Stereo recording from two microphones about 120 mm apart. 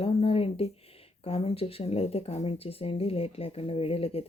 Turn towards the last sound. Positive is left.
turn(degrees=55)  # may be behind; listen again after turning